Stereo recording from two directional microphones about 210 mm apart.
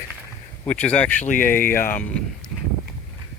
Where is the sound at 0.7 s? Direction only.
5° left (ahead or behind).